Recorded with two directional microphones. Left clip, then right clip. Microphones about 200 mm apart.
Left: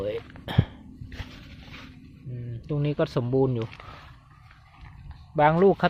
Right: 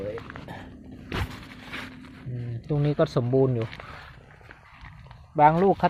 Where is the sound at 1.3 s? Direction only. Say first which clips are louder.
Right 7 dB; 50° right (ahead or behind).